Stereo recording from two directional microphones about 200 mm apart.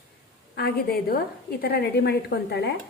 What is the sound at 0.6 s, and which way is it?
A woman's voice, 50° left (ahead or behind).